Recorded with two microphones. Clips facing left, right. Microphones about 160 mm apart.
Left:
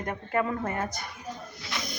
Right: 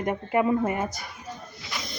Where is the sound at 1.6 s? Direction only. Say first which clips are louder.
Left 1 dB; centre (ahead or behind).